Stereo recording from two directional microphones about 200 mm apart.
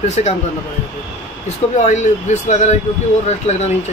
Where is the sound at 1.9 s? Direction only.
35° left (ahead or behind).